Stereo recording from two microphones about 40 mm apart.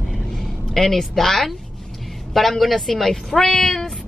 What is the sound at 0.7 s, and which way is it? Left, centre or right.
Speech, centre.